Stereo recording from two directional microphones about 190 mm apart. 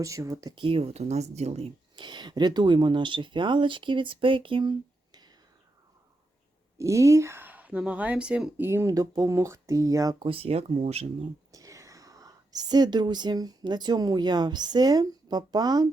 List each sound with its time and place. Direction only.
0.0 s speech: 15° right (ahead or behind)
6.7 s speech: 15° right (ahead or behind); by 11.0 s 30° right (ahead or behind)
11.5 s speech: 15° right (ahead or behind)